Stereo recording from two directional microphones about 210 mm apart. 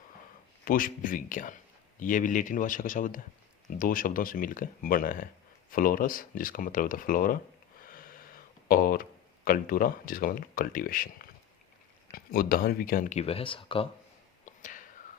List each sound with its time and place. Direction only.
0.6 s speech: 40° left (ahead or behind); by 13.8 s 25° left (ahead or behind)
14.4 s whispering: 35° left (ahead or behind)